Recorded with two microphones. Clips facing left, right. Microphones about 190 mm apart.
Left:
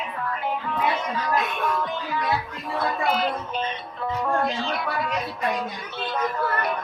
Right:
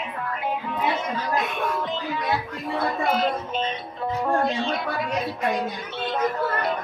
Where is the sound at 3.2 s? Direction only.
25° right (ahead or behind).